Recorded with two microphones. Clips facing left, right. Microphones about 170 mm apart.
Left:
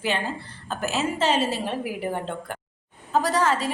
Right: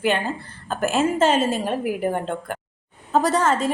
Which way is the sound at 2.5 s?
55° right (ahead or behind).